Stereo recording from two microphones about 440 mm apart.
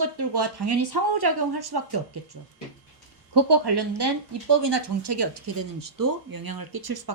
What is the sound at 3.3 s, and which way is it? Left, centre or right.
Speech, right.